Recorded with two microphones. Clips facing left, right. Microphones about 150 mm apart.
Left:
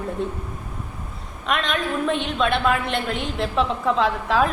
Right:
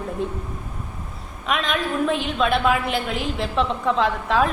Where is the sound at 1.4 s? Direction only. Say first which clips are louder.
Even; centre (ahead or behind).